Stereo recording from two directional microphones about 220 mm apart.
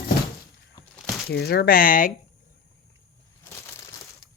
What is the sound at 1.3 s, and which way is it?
Speech, 50° left (ahead or behind).